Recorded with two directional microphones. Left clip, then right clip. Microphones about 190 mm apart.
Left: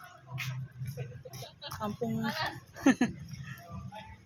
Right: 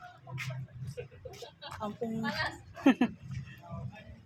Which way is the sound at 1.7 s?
10° left (ahead or behind).